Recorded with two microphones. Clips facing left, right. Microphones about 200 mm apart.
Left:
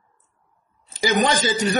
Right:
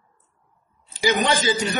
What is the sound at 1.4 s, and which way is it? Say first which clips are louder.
Speech: left 1 dB; 40° left (ahead or behind).